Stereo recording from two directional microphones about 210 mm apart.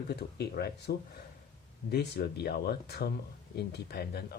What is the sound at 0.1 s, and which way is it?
Speech, 50° left (ahead or behind).